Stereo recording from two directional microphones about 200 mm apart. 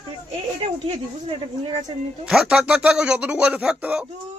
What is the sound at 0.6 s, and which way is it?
Speech, 30° right (ahead or behind).